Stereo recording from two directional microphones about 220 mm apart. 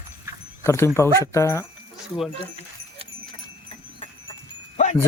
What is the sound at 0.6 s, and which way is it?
Speech, 10° left (ahead or behind).